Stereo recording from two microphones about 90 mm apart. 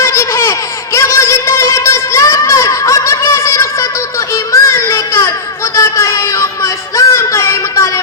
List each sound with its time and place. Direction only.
0.0 s laughter: 30° left (ahead or behind)
0.9 s a sound: 30° left (ahead or behind)
5.7 s music: 35° left (ahead or behind)